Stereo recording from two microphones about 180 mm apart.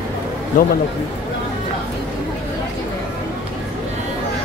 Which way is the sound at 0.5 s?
50° left (ahead or behind).